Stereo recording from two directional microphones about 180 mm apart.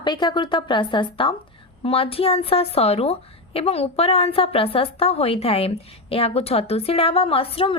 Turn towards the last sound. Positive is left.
turn(degrees=30)  # may be behind; listen again after turning